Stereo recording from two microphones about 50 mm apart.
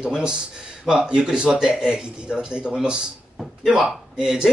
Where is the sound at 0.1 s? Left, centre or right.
Centre.